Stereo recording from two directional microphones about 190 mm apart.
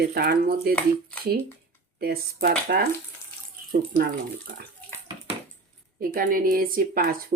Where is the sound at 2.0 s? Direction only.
55° right (ahead or behind).